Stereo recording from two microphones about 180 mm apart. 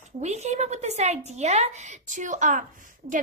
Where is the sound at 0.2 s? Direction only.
40° right (ahead or behind).